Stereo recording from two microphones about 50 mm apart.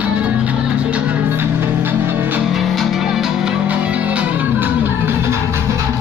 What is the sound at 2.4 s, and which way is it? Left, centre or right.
Music, centre.